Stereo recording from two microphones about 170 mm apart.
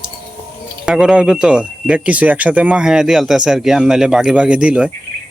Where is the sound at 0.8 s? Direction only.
5° right (ahead or behind).